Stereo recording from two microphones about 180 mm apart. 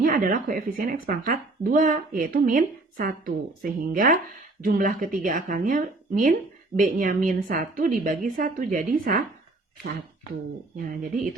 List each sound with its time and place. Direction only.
0.0 s speech: 50° right (ahead or behind)